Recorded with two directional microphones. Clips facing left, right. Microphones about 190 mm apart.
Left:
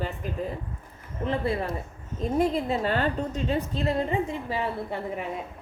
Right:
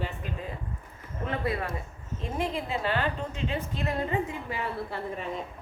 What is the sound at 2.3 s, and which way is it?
A woman's voice, 40° left (ahead or behind).